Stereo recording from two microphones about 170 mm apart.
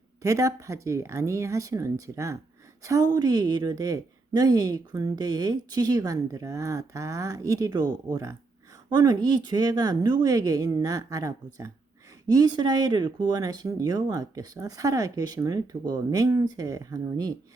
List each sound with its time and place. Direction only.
0.2 s a woman's voice: 20° right (ahead or behind)